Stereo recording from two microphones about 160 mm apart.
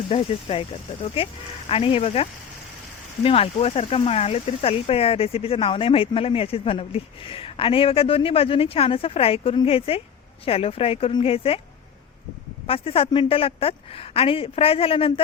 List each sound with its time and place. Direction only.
0.1 s speech: 35° left (ahead or behind)
3.2 s speech: 35° left (ahead or behind)
12.6 s speech: 35° left (ahead or behind)